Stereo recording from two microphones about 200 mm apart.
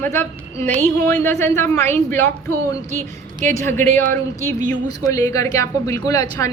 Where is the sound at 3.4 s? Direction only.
10° left (ahead or behind).